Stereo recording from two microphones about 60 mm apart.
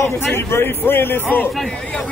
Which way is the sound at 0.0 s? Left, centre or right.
Left.